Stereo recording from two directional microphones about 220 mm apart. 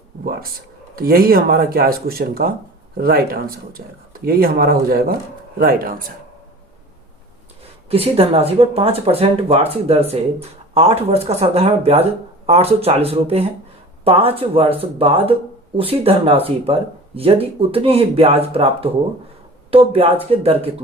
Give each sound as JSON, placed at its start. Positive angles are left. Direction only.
{"t": 0.9, "sound": "speech", "side_deg": -40}
{"t": 7.9, "sound": "speech", "side_deg": -25}